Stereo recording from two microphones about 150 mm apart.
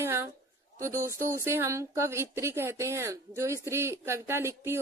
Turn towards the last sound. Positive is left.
turn(degrees=-15)  # may be behind; listen again after turning